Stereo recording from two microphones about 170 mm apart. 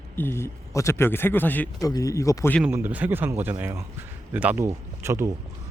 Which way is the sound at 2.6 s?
10° right (ahead or behind).